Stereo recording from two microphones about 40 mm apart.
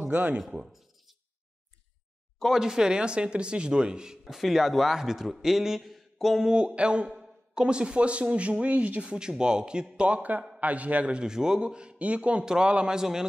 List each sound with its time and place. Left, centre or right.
0.1 s speech: right
2.3 s a sound: centre
2.6 s speech: centre
6.4 s speech: right
7.1 s speech: centre; by 9.1 s right
9.1 s speech: right
9.9 s a man's voice: right
11.1 s speech: centre
12.9 s speech: centre